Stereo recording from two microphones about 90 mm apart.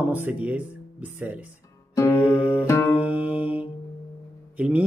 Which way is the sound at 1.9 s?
35° left (ahead or behind).